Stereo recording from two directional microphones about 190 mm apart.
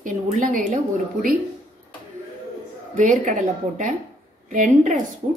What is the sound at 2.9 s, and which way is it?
Speech, 40° right (ahead or behind).